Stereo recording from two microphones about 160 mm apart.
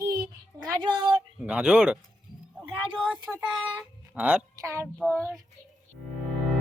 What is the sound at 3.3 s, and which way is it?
A woman's voice, centre (ahead or behind).